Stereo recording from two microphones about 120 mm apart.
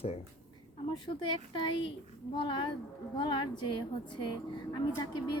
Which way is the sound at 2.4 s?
45° left (ahead or behind).